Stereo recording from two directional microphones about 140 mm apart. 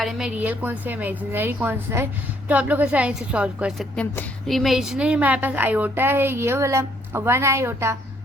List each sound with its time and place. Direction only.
0.0 s a woman's voice: centre (ahead or behind)
3.9 s speech: 10° left (ahead or behind)
4.4 s a woman's voice: centre (ahead or behind); by 7.9 s 20° right (ahead or behind)